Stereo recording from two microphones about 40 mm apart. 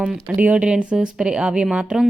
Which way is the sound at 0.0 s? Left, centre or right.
Right.